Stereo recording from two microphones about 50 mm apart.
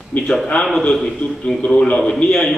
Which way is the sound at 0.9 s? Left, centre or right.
Centre.